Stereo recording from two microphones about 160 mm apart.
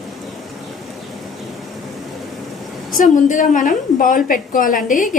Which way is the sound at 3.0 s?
55° left (ahead or behind).